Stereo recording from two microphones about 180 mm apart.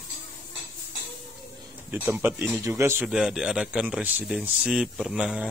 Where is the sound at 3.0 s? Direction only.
5° right (ahead or behind).